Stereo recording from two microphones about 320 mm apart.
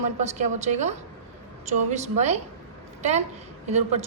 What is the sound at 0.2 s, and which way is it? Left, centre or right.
A woman's voice, right.